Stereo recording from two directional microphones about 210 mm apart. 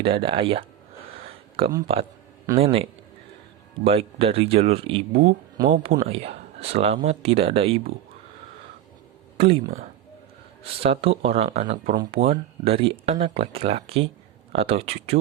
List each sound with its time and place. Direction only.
0.0 s speech: 25° right (ahead or behind)
5.6 s speech: 35° right (ahead or behind)
6.1 s speech: 30° right (ahead or behind)
9.4 s speech: 25° right (ahead or behind)